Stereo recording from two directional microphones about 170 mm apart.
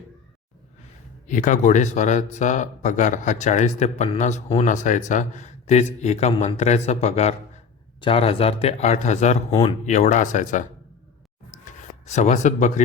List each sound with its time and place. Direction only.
1.3 s speech: 45° left (ahead or behind)
9.5 s speech: 25° left (ahead or behind)
9.8 s speech: 45° left (ahead or behind)
11.6 s a sound: 45° left (ahead or behind)